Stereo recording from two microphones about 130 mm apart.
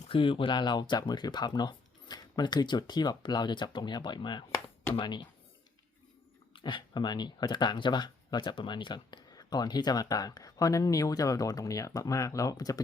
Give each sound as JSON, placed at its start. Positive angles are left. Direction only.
{"t": 0.1, "sound": "speech", "side_deg": 40}
{"t": 6.5, "sound": "speech", "side_deg": 40}